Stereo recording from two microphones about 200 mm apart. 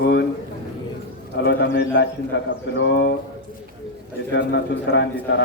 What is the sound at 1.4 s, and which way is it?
A man's voice, 60° left (ahead or behind).